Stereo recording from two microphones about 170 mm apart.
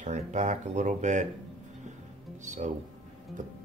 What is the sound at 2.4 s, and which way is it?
Speech, 45° right (ahead or behind).